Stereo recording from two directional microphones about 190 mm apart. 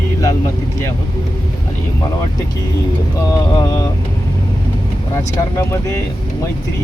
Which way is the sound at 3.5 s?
20° left (ahead or behind).